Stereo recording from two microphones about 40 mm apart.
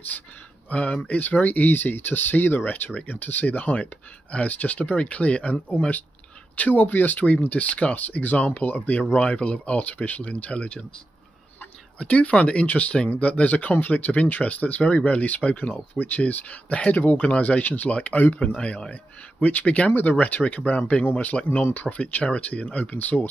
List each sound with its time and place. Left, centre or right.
0.7 s speech: left
2.6 s speech: left
3.2 s speech: left
3.7 s speech: left
9.1 s speech: left
12.0 s speech: left
21.8 s speech: left